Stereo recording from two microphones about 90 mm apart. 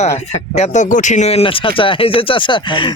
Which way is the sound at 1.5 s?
80° left.